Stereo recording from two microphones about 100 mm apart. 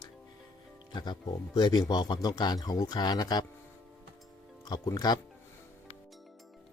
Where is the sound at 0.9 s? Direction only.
45° left (ahead or behind).